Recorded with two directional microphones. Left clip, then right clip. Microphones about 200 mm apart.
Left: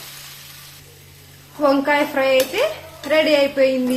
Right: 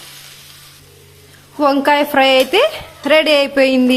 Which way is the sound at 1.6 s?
60° right (ahead or behind).